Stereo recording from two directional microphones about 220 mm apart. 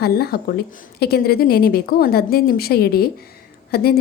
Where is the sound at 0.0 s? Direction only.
45° left (ahead or behind).